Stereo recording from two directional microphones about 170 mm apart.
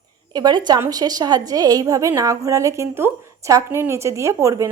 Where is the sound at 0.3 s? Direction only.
25° right (ahead or behind).